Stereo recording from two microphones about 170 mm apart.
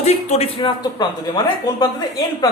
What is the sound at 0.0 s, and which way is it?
Speech, 40° left (ahead or behind).